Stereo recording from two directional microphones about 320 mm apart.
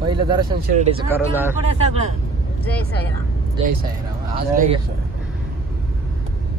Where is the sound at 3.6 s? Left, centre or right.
Centre.